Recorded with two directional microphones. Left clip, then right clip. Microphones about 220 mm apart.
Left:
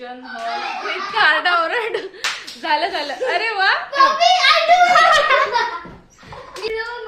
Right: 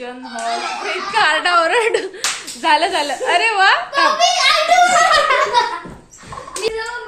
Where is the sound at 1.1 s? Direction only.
5° right (ahead or behind).